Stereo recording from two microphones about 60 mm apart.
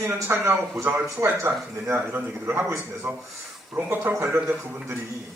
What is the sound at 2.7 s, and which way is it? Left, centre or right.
Speech, right.